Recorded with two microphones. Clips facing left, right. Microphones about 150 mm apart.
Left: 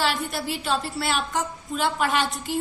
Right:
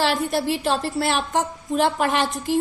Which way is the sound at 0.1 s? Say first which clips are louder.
Right 6 dB; 45° right (ahead or behind).